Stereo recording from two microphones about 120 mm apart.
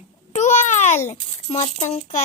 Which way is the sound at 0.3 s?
85° left.